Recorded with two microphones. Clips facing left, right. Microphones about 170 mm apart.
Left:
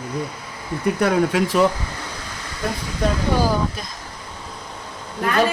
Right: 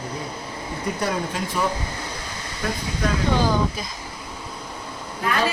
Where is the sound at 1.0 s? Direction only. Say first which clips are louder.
Left 9 dB; 75° left (ahead or behind).